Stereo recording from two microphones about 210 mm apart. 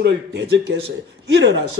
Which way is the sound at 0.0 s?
55° right (ahead or behind).